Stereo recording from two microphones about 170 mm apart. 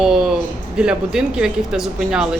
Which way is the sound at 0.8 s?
5° right (ahead or behind).